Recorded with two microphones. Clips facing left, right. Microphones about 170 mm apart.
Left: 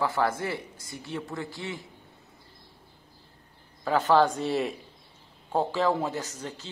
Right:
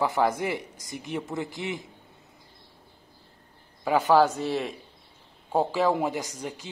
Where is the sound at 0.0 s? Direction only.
15° right (ahead or behind).